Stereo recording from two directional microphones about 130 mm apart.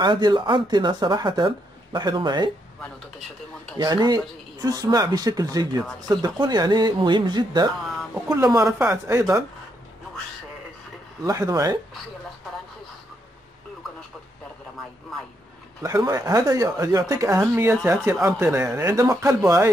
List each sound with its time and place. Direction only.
0.0 s speech: 35° right (ahead or behind)
3.7 s speech: 30° right (ahead or behind)
11.2 s speech: 25° right (ahead or behind)
15.8 s speech: 25° right (ahead or behind)